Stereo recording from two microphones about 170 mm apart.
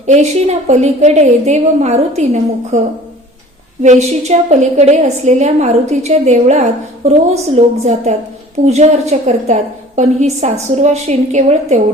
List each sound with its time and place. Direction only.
0.0 s a woman's voice: 40° right (ahead or behind)
3.8 s a woman's voice: 45° right (ahead or behind)